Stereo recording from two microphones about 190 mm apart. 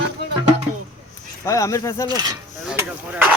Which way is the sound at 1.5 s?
15° left (ahead or behind).